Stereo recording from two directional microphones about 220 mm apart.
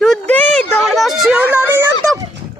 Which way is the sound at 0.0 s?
5° left (ahead or behind).